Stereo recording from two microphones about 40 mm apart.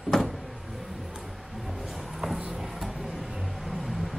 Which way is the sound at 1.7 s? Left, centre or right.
Centre.